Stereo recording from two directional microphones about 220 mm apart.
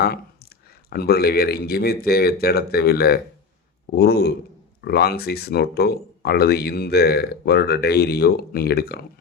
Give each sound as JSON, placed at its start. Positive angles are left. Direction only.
{"t": 0.9, "sound": "speech", "side_deg": 45}